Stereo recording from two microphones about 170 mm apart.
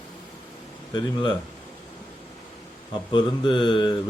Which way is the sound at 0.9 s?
25° left (ahead or behind).